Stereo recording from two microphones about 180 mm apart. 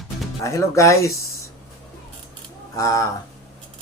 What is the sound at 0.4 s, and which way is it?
Speech, 15° left (ahead or behind).